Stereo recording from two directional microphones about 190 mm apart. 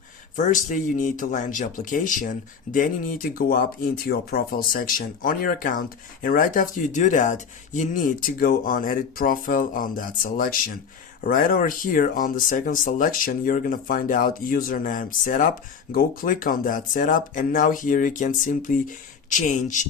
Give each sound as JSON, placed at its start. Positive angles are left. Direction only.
{"t": 0.3, "sound": "speech", "side_deg": 40}